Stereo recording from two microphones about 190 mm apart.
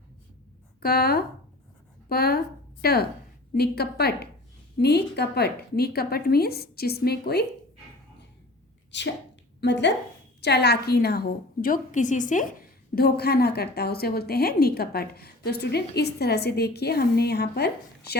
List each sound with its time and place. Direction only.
0.8 s a woman's voice: 55° left (ahead or behind)
8.9 s a woman's voice: 70° left (ahead or behind)